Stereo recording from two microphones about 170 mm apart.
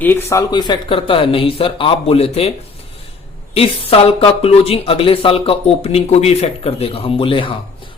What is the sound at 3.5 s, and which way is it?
A man's voice, 35° left (ahead or behind).